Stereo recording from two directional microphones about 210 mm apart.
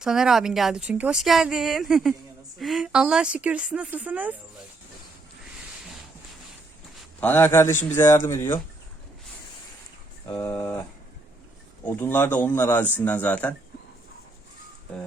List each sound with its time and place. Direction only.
0.0 s speech: 5° right (ahead or behind)
7.2 s speech: 10° left (ahead or behind)
10.2 s speech: 10° left (ahead or behind)
11.9 s speech: 10° left (ahead or behind)